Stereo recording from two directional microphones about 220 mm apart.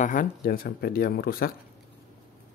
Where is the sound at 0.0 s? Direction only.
35° left (ahead or behind).